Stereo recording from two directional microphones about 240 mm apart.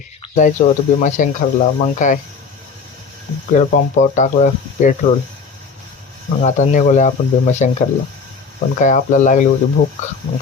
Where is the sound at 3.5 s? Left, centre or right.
Left.